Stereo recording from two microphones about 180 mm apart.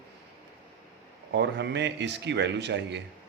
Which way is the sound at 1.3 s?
75° right (ahead or behind).